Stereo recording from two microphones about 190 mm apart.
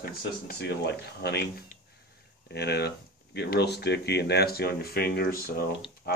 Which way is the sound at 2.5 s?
60° left (ahead or behind).